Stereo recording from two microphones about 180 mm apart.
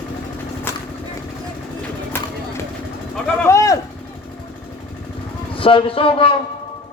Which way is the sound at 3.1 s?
5° left (ahead or behind).